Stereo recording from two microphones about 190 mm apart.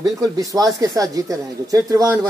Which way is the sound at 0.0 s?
20° right (ahead or behind).